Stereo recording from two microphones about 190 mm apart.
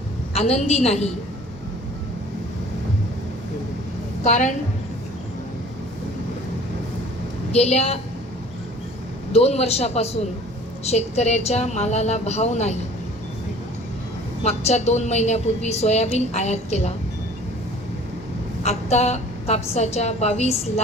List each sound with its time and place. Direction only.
0.3 s a woman's voice: 35° left (ahead or behind)
4.2 s a woman's voice: 40° left (ahead or behind)
7.5 s a woman's voice: 35° left (ahead or behind)
9.3 s a woman's voice: 35° left (ahead or behind)
14.4 s a woman's voice: 35° left (ahead or behind)
18.6 s a woman's voice: 35° left (ahead or behind)